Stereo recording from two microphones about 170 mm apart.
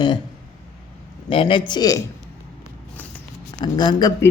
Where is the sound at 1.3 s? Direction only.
30° left (ahead or behind).